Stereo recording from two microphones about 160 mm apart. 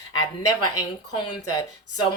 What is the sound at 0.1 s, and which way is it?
Speech, 25° left (ahead or behind).